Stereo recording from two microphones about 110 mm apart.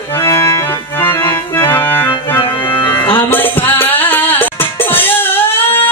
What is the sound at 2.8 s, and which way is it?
Music, 20° left (ahead or behind).